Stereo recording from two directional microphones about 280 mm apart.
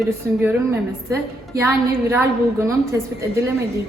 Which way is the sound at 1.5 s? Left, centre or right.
Centre.